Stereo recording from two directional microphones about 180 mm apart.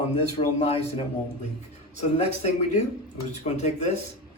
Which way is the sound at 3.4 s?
40° left (ahead or behind).